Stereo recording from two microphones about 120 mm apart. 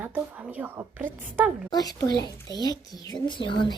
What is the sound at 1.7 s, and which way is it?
A child's voice, 30° left (ahead or behind).